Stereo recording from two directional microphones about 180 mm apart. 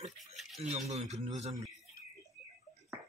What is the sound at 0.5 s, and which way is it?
Speech, 40° right (ahead or behind).